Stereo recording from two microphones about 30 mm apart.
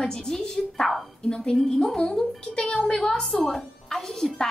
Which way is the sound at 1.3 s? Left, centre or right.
Left.